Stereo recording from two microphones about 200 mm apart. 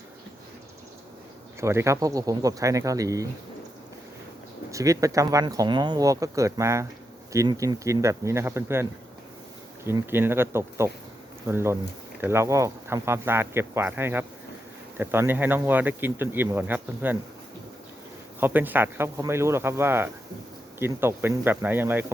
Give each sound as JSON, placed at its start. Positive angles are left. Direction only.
{"t": 1.6, "sound": "speech", "side_deg": -15}
{"t": 4.7, "sound": "speech", "side_deg": -15}
{"t": 18.3, "sound": "speech", "side_deg": -10}